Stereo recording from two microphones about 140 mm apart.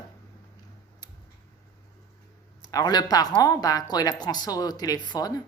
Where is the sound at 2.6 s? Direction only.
30° left (ahead or behind).